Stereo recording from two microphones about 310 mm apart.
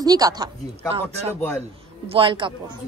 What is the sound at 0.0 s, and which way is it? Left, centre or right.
Speech, centre.